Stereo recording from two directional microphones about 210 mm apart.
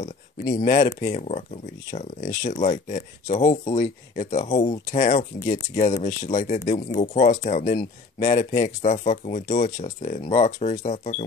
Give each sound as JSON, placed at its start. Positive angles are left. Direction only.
{"t": 0.6, "sound": "speech", "side_deg": 35}